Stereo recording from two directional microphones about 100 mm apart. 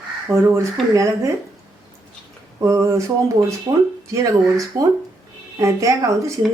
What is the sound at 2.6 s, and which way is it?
A woman's voice, 30° right (ahead or behind).